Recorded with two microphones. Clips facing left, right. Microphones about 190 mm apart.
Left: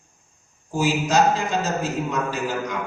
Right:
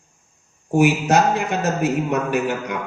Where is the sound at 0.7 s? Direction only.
65° right (ahead or behind).